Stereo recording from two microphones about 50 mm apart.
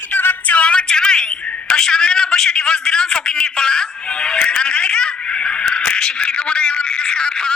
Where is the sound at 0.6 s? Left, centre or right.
Left.